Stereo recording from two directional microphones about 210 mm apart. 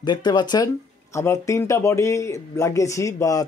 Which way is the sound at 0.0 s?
20° left (ahead or behind).